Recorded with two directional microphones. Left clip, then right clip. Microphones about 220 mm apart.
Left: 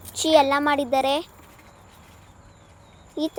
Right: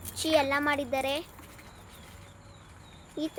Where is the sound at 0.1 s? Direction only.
25° left (ahead or behind).